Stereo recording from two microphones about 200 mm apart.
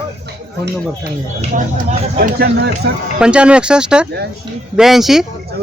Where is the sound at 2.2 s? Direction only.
50° right (ahead or behind).